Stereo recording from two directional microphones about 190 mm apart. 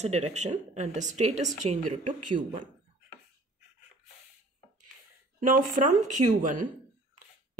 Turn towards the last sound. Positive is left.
turn(degrees=-45)  # may be behind; listen again after turning